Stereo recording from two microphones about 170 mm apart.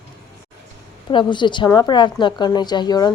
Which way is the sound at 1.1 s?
30° left (ahead or behind).